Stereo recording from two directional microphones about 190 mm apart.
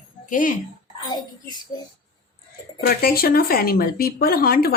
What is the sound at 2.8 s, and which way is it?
Speech, 55° left (ahead or behind).